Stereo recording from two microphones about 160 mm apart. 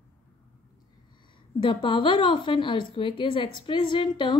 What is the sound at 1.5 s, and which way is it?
A woman's voice, 35° left (ahead or behind).